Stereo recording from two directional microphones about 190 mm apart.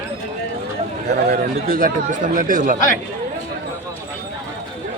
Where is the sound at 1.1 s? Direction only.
55° right (ahead or behind).